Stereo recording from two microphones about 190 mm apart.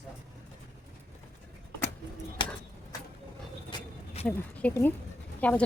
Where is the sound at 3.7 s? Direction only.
30° left (ahead or behind).